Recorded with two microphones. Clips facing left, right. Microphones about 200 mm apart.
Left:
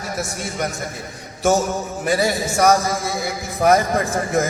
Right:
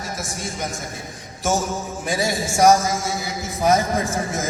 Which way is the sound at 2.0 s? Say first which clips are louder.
Left 4 dB; 60° left (ahead or behind).